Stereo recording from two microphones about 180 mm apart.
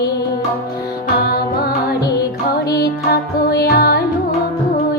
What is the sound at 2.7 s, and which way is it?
Music, 60° left (ahead or behind).